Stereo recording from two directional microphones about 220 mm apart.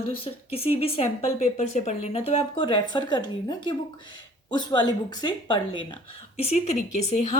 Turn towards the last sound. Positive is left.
turn(degrees=35)  # may be behind; listen again after turning